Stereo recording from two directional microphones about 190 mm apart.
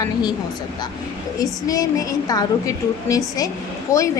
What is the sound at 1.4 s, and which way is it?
A woman's voice, 20° left (ahead or behind).